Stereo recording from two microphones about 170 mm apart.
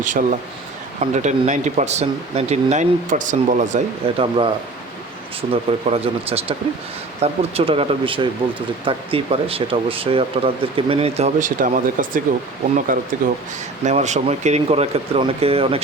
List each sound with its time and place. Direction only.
0.0 s speech: 50° right (ahead or behind)
4.0 s speech: 30° right (ahead or behind); by 13.1 s 55° right (ahead or behind)
13.8 s speech: 45° right (ahead or behind)